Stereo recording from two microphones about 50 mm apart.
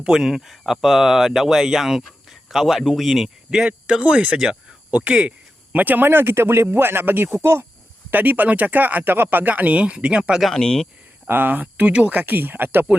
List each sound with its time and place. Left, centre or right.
0.2 s speech: centre
3.8 s speech: centre
5.7 s speech: right
7.3 s speech: right
8.1 s speech: right
9.8 s speech: right
10.5 s speech: centre
11.3 s speech: right
12.2 s speech: right